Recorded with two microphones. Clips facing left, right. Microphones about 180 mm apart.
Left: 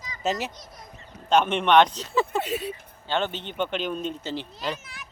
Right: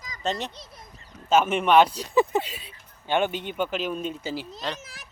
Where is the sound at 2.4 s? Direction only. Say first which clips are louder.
Left 7 dB; 65° left (ahead or behind).